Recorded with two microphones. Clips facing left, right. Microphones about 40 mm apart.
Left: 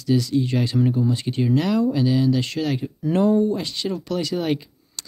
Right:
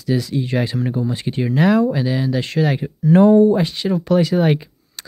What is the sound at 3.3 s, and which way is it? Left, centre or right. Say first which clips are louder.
Speech: right 7 dB; right.